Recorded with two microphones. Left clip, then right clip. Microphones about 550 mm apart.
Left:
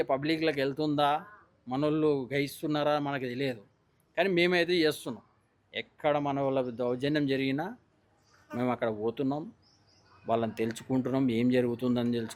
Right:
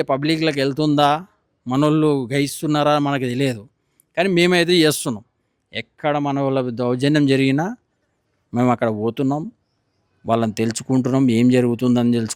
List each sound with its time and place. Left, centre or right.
0.0 s speech: right